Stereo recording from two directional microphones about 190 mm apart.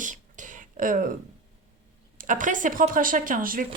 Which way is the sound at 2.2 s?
45° right (ahead or behind).